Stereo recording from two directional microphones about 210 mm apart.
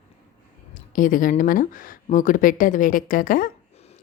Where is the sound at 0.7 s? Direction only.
40° left (ahead or behind).